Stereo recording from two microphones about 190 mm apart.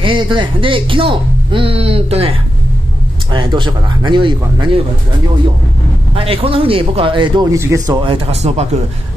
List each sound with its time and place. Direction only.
0.0 s a man's voice: 25° right (ahead or behind)
6.1 s a man's voice: 30° right (ahead or behind)